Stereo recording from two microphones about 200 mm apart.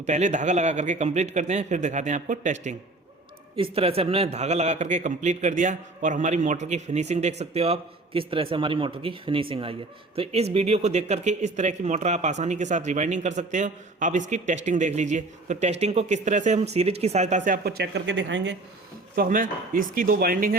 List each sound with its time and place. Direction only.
0.0 s speech: 35° right (ahead or behind)
3.5 s speech: 30° right (ahead or behind); by 18.5 s 60° right (ahead or behind)
19.1 s speech: 45° right (ahead or behind)